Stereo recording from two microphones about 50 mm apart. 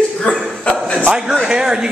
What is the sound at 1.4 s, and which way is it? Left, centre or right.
Speech, centre.